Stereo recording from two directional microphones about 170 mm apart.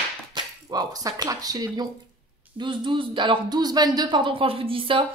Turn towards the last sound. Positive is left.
turn(degrees=-30)  # may be behind; listen again after turning